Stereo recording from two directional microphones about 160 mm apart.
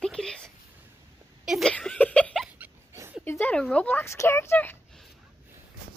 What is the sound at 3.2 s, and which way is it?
Speech, 10° left (ahead or behind).